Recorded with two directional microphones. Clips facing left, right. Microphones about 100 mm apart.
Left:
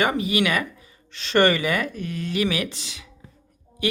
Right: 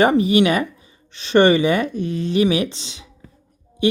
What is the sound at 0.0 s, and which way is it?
Speech, 35° right (ahead or behind).